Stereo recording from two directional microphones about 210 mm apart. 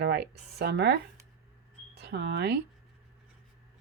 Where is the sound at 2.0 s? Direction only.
50° right (ahead or behind).